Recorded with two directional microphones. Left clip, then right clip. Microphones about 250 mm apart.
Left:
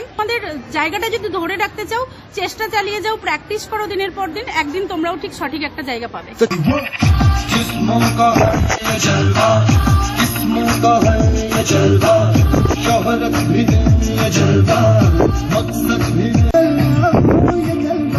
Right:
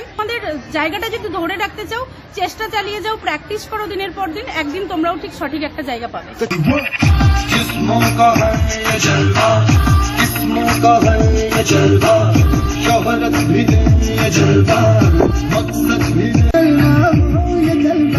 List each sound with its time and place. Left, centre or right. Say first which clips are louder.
0.8 s a woman's voice: left 2 dB; centre
6.4 s speech: left 1 dB; left
15.8 s music: right 2 dB; left